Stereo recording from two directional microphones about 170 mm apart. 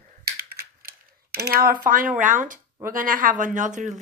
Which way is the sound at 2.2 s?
50° right (ahead or behind).